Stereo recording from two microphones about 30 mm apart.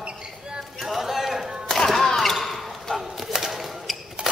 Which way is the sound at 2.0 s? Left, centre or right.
Centre.